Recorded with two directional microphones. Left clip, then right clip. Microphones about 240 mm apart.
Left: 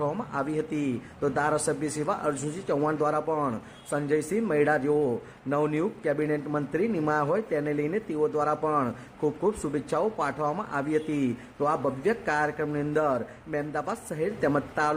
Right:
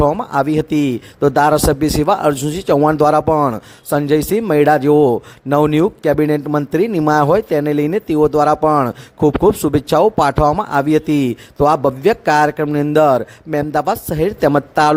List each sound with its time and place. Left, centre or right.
0.0 s a man's voice: right